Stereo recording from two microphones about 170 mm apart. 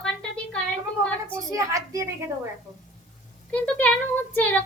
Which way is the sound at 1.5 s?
20° right (ahead or behind).